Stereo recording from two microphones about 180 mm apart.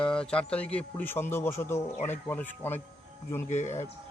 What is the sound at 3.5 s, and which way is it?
Speech, 40° left (ahead or behind).